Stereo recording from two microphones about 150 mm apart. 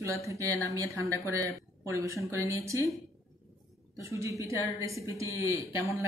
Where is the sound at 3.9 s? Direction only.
20° right (ahead or behind).